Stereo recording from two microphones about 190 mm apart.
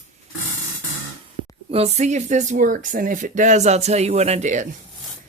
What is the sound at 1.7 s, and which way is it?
Speech, 35° right (ahead or behind).